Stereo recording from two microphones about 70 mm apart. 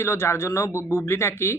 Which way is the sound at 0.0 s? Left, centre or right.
Left.